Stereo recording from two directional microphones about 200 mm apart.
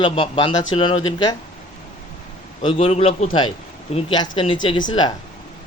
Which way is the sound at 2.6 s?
30° left (ahead or behind).